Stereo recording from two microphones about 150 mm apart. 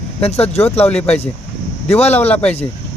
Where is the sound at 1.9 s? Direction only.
45° left (ahead or behind).